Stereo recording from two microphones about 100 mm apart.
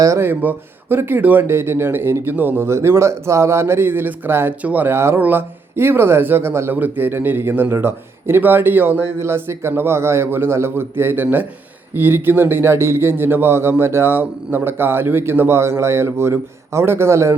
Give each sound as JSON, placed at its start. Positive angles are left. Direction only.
{"t": 0.0, "sound": "speech", "side_deg": -25}